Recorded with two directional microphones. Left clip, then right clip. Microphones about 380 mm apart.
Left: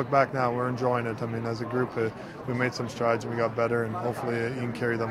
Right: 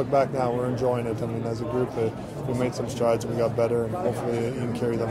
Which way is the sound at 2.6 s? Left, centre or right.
Left.